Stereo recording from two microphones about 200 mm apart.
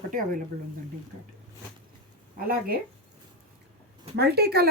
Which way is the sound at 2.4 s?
45° right (ahead or behind).